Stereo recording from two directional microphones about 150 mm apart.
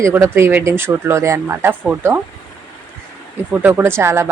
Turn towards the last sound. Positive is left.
turn(degrees=-20)  # may be behind; listen again after turning